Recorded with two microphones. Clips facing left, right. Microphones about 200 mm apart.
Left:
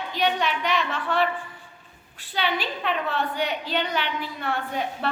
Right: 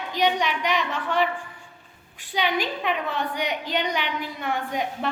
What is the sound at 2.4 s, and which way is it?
A woman's voice, 15° right (ahead or behind).